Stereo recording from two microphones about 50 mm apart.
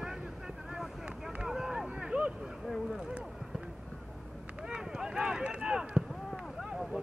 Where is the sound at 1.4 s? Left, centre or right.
Centre.